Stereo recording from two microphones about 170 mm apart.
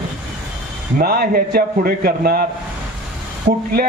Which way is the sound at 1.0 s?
65° right (ahead or behind).